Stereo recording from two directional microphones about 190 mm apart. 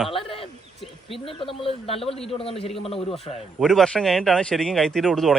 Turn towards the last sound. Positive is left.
turn(degrees=0)  # may be behind; listen again after turning